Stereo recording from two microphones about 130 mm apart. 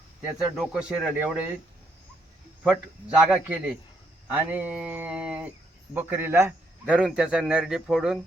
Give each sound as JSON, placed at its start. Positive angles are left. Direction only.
{"t": 0.5, "sound": "speech", "side_deg": -5}
{"t": 3.2, "sound": "a sound", "side_deg": -10}
{"t": 5.9, "sound": "a man's voice", "side_deg": -15}
{"t": 6.9, "sound": "speech", "side_deg": -5}